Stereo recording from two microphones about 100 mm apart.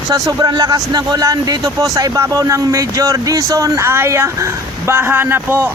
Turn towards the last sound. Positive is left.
turn(degrees=-20)  # may be behind; listen again after turning